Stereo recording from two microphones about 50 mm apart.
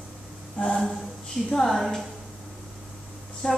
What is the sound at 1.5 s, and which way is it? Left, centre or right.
Speech, centre.